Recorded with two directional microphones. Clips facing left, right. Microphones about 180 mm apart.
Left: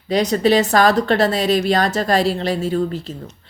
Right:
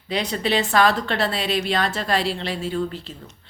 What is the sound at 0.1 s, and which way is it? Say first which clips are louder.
A woman's voice: left 8 dB; 40° left (ahead or behind).